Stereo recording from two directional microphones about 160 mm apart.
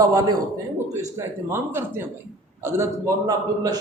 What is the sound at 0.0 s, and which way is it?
A man's voice, 25° right (ahead or behind).